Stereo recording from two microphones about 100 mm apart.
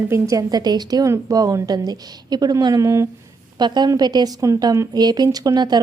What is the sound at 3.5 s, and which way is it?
Speech, 45° right (ahead or behind).